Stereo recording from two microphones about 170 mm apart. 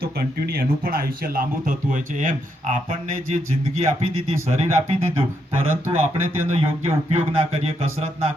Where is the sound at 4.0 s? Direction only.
35° right (ahead or behind).